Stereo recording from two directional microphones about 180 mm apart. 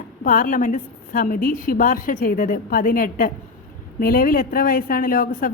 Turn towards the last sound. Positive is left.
turn(degrees=50)  # may be behind; listen again after turning